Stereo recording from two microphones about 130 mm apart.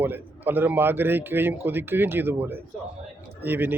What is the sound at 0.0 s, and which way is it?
A man's voice, 15° right (ahead or behind).